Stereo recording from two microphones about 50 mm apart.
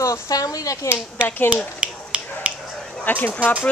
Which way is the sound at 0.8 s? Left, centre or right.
Left.